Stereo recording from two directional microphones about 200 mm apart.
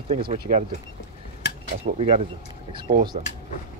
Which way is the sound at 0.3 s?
35° right (ahead or behind).